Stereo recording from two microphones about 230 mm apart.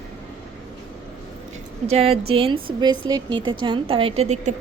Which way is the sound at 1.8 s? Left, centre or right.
Right.